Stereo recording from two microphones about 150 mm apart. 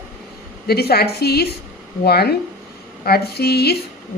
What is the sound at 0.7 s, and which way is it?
Speech, 90° left.